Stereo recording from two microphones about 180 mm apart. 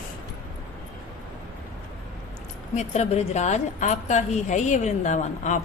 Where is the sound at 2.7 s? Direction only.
35° left (ahead or behind).